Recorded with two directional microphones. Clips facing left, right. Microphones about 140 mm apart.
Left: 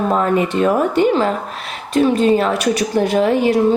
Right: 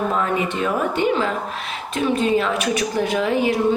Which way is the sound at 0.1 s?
40° left (ahead or behind).